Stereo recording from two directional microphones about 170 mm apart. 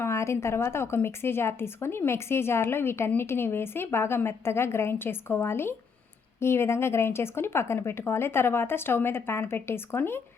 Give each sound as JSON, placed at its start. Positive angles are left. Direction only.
{"t": 0.0, "sound": "a woman's voice", "side_deg": 15}